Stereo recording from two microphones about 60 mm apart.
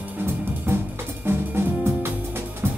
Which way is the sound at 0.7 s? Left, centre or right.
Right.